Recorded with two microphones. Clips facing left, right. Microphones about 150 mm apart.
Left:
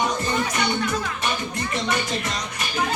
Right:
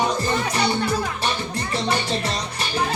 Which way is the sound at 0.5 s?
30° right (ahead or behind).